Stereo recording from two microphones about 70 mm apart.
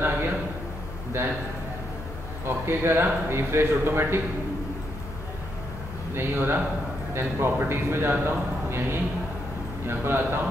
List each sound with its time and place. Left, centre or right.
1.1 s a man's voice: right
2.4 s a man's voice: right
6.1 s a man's voice: right